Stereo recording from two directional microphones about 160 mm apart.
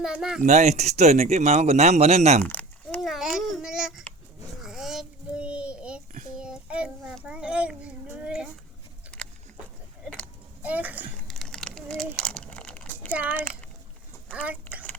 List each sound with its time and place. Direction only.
0.0 s speech: 5° right (ahead or behind)
0.4 s speech: 45° right (ahead or behind)
2.4 s a sound: 10° left (ahead or behind)
3.0 s babbling: centre (ahead or behind)
4.6 s a sound: 5° right (ahead or behind)
6.3 s child singing: 5° right (ahead or behind)
10.6 s a child's voice: 10° right (ahead or behind)
11.3 s crumpling: 5° left (ahead or behind)
14.4 s a sound: 10° right (ahead or behind)